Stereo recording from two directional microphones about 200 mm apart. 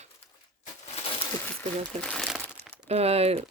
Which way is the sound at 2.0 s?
5° left (ahead or behind).